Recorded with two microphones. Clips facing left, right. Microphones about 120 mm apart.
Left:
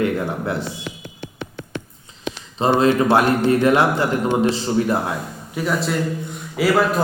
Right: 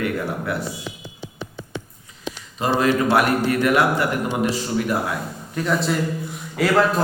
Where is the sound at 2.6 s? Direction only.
25° left (ahead or behind).